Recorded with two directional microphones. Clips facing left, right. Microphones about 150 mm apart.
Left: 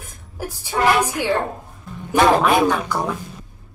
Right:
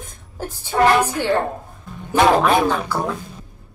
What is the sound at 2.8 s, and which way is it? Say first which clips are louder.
Speech: even; 10° right (ahead or behind).